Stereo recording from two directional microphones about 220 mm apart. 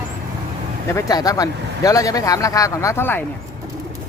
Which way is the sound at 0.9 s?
15° left (ahead or behind).